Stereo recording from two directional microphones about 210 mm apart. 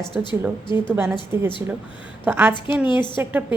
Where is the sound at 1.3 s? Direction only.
10° right (ahead or behind).